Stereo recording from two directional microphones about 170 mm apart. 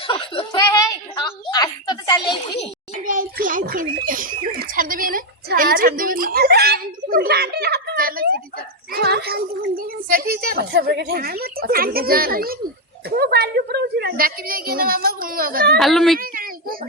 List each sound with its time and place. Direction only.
0.1 s speech: 30° left (ahead or behind)
0.7 s a woman's voice: 20° left (ahead or behind)
3.0 s a child's voice: 55° right (ahead or behind)
8.9 s a child's voice: 70° right (ahead or behind)
15.8 s speech: centre (ahead or behind)
16.1 s a sound: 55° right (ahead or behind)